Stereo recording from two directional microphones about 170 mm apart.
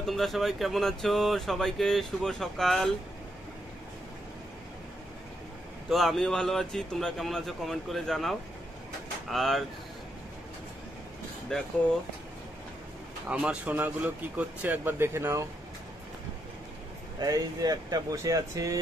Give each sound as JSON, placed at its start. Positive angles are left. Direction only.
{"t": 0.0, "sound": "speech", "side_deg": 0}
{"t": 5.9, "sound": "speech", "side_deg": 0}
{"t": 11.5, "sound": "speech", "side_deg": 5}
{"t": 13.3, "sound": "speech", "side_deg": -5}
{"t": 17.2, "sound": "speech", "side_deg": -20}